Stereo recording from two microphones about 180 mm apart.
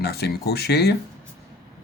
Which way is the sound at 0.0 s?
65° left (ahead or behind).